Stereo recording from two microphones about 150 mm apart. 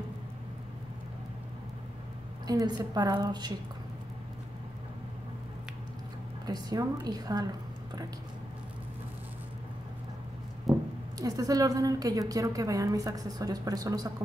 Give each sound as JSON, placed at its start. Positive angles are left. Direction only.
{"t": 2.4, "sound": "a woman's voice", "side_deg": -25}
{"t": 6.4, "sound": "a woman's voice", "side_deg": -25}
{"t": 10.7, "sound": "a sound", "side_deg": 0}
{"t": 11.1, "sound": "a woman's voice", "side_deg": -25}